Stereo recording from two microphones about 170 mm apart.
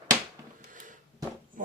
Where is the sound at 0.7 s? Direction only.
50° right (ahead or behind).